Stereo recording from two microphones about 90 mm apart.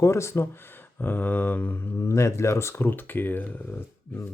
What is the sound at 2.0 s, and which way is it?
Speech, 35° left (ahead or behind).